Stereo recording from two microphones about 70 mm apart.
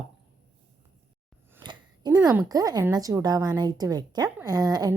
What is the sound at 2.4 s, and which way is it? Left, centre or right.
A woman's voice, right.